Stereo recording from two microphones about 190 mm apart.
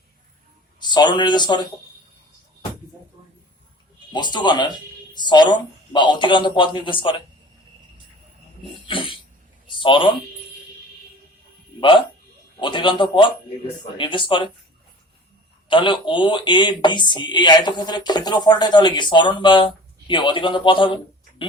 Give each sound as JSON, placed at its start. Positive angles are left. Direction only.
{"t": 0.8, "sound": "speech", "side_deg": 25}
{"t": 4.1, "sound": "speech", "side_deg": 25}
{"t": 8.9, "sound": "a sound", "side_deg": 25}
{"t": 11.8, "sound": "speech", "side_deg": 25}
{"t": 15.7, "sound": "speech", "side_deg": 25}